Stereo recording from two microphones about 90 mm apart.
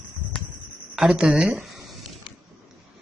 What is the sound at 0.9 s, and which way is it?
Speech, 5° right (ahead or behind).